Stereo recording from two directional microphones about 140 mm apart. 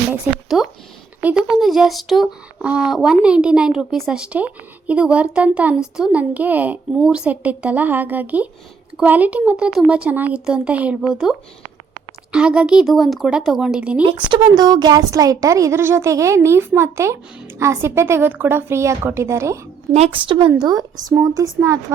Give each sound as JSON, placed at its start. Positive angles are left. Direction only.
{"t": 0.4, "sound": "speech", "side_deg": -5}
{"t": 14.0, "sound": "a woman's voice", "side_deg": -35}
{"t": 20.1, "sound": "a woman's voice", "side_deg": -35}